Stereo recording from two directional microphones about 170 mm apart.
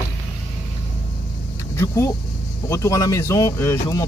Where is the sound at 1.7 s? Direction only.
15° left (ahead or behind).